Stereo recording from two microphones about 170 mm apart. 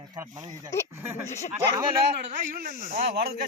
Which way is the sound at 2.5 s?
55° right (ahead or behind).